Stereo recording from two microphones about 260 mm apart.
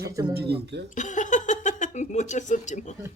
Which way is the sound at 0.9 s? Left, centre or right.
Left.